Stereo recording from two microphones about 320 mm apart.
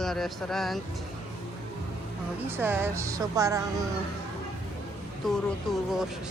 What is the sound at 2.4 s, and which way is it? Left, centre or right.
Speech, centre.